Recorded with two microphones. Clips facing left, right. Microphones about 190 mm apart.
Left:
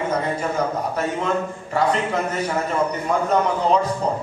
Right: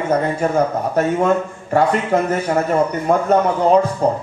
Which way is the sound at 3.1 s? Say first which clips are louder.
Right 6 dB; 50° right (ahead or behind).